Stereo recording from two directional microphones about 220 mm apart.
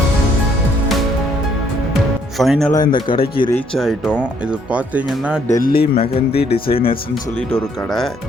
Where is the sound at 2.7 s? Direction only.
20° left (ahead or behind).